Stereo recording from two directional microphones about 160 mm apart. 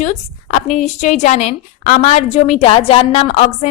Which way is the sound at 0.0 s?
45° left (ahead or behind).